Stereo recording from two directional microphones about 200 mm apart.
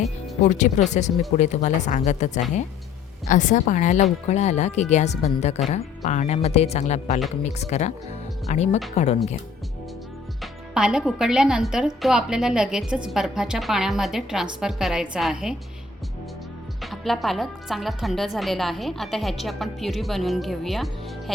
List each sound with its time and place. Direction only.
0.4 s speech: 40° left (ahead or behind)
10.4 s a woman's voice: 5° right (ahead or behind)
16.8 s a woman's voice: centre (ahead or behind)